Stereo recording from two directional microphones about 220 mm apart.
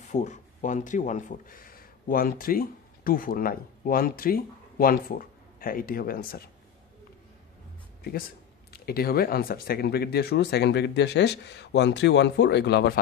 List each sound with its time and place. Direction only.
0.0 s speech: 35° left (ahead or behind)
8.7 s speech: 45° left (ahead or behind)